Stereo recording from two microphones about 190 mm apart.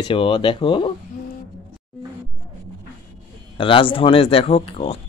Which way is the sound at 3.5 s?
25° left (ahead or behind).